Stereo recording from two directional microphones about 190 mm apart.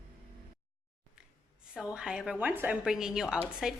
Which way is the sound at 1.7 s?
5° right (ahead or behind).